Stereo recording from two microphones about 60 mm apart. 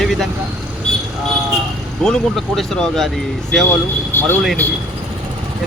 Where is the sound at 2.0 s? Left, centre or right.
Centre.